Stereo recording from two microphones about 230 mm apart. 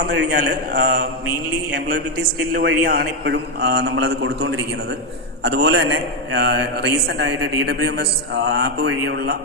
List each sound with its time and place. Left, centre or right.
0.0 s a man's voice: right
2.5 s a man's voice: right